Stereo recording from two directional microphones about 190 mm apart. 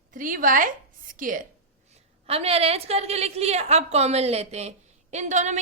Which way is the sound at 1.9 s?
30° right (ahead or behind).